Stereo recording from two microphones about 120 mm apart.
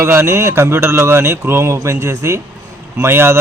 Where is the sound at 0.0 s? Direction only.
20° right (ahead or behind).